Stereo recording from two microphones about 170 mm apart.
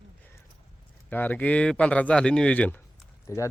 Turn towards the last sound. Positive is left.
turn(degrees=20)  # may be behind; listen again after turning